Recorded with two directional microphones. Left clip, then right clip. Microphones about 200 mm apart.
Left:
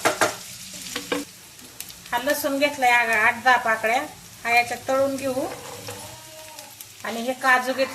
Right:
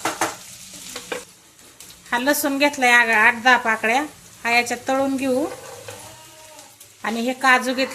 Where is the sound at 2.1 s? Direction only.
55° right (ahead or behind).